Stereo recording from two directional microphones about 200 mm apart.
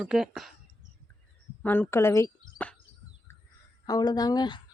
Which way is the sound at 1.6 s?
10° left (ahead or behind).